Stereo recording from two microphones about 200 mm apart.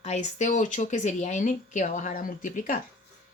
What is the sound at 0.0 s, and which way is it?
Speech, 35° left (ahead or behind).